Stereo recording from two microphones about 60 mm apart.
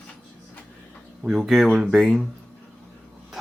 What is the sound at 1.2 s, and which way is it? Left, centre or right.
Speech, centre.